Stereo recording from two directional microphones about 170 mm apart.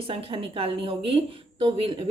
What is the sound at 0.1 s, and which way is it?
A woman's voice, 35° right (ahead or behind).